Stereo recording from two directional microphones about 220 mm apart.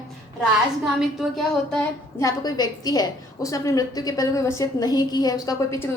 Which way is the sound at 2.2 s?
15° left (ahead or behind).